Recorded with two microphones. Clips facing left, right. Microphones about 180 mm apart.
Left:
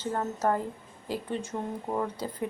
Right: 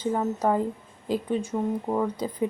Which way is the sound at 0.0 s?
10° right (ahead or behind).